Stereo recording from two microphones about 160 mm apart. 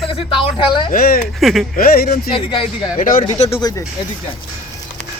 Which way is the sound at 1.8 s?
65° left (ahead or behind).